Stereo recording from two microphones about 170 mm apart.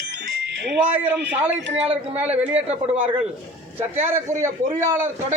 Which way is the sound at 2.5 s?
35° right (ahead or behind).